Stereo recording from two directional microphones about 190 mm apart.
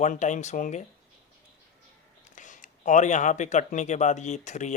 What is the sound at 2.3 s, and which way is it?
Speech, 40° left (ahead or behind).